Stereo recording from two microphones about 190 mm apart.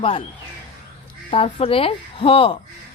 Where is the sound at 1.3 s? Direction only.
30° left (ahead or behind).